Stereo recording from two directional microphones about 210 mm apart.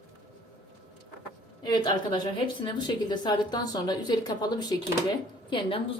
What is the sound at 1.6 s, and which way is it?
A woman's voice, 20° left (ahead or behind).